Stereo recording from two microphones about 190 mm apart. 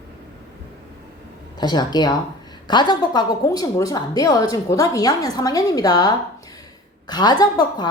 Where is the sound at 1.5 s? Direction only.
20° left (ahead or behind).